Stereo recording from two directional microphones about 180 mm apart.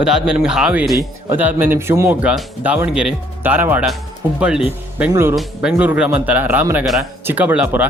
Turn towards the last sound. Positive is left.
turn(degrees=-5)  # may be behind; listen again after turning